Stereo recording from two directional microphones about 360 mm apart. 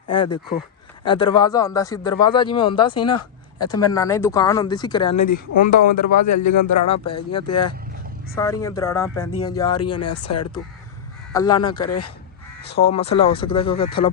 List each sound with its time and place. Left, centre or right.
0.1 s a man's voice: centre
6.1 s speech: left
8.4 s a man's voice: centre
9.8 s speech: left
11.3 s a man's voice: centre
12.6 s a man's voice: left
13.0 s a man's voice: centre